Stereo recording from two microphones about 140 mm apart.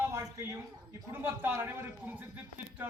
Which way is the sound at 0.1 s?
20° right (ahead or behind).